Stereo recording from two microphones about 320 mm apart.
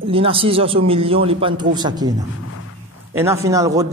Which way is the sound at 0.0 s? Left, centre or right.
Centre.